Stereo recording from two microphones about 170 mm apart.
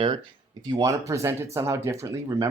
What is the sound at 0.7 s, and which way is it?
Speech, 20° right (ahead or behind).